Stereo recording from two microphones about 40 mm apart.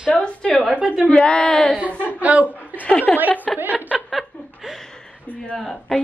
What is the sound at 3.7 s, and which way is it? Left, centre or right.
Speech, right.